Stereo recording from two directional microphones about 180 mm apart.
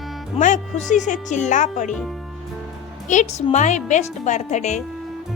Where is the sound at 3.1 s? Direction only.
40° left (ahead or behind).